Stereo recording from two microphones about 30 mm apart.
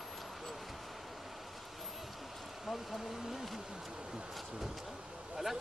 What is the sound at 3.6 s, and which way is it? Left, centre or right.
Speech, centre.